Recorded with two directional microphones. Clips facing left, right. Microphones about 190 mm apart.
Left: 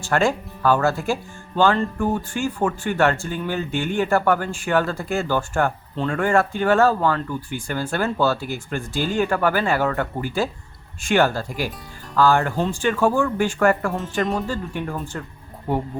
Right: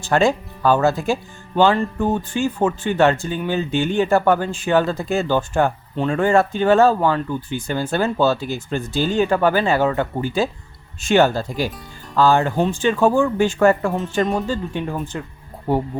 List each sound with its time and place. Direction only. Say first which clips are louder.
0.0 s speech: right 3 dB; 20° right (ahead or behind)